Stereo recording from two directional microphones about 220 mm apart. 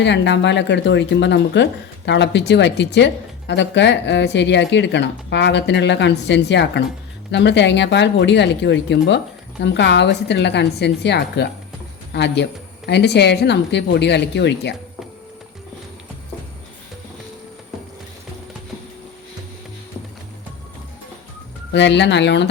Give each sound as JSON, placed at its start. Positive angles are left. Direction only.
{"t": 0.0, "sound": "speech", "side_deg": 50}
{"t": 21.7, "sound": "speech", "side_deg": 50}